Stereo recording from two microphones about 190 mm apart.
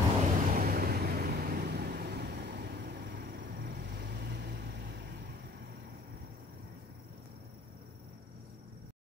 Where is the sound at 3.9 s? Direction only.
60° right (ahead or behind).